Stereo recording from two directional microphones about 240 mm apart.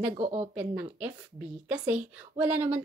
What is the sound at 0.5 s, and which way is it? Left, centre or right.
A woman's voice, centre.